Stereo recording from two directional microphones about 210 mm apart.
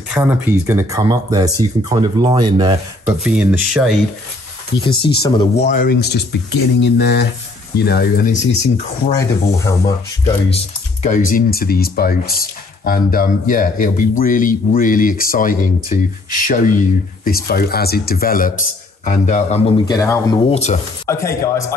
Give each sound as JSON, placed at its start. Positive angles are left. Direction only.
{"t": 0.1, "sound": "speech", "side_deg": -10}
{"t": 3.3, "sound": "speech", "side_deg": -5}
{"t": 4.8, "sound": "speech", "side_deg": 25}
{"t": 5.6, "sound": "speech", "side_deg": 45}
{"t": 9.6, "sound": "speech", "side_deg": 15}
{"t": 11.0, "sound": "speech", "side_deg": 35}
{"t": 19.9, "sound": "speech", "side_deg": 15}
{"t": 20.4, "sound": "speech", "side_deg": 30}
{"t": 21.1, "sound": "speech", "side_deg": 15}